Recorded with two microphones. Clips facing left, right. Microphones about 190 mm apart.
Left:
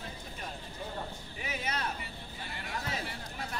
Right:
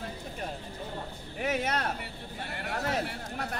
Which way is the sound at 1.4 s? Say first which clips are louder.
Right 7 dB; 65° right (ahead or behind).